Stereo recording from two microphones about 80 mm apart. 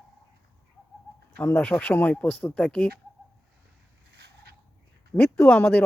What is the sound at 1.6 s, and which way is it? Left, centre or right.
Speech, centre.